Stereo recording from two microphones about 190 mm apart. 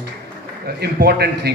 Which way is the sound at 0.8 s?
55° right (ahead or behind).